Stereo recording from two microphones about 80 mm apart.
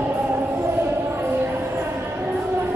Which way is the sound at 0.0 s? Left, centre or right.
Right.